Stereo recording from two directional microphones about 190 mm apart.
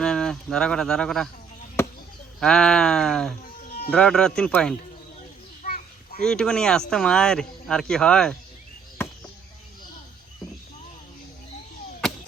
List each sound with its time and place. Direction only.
0.0 s speech: 5° left (ahead or behind)
1.8 s chop: 15° left (ahead or behind)
2.4 s speech: 5° left (ahead or behind)
3.4 s music: 50° left (ahead or behind)
3.9 s speech: 5° left (ahead or behind)
5.6 s children playing: 45° left (ahead or behind)
6.2 s speech: 5° left (ahead or behind)